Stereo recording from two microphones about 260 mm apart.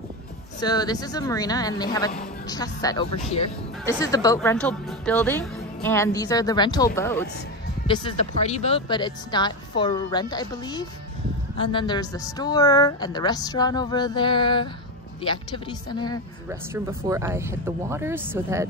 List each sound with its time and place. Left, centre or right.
0.6 s speech: centre
16.4 s speech: centre